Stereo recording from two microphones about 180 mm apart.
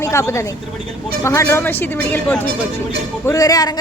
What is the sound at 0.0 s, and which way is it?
Speech, 15° left (ahead or behind).